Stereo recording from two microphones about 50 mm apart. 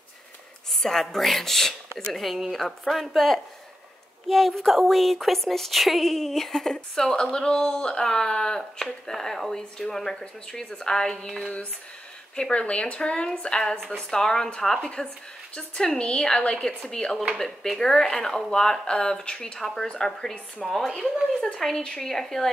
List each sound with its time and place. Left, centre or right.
0.8 s speech: centre
4.3 s speech: centre
12.4 s a woman's voice: left